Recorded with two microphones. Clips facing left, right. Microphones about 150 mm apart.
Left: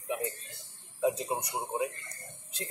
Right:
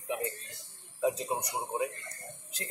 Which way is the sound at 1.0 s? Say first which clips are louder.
Left 1 dB; 20° left (ahead or behind).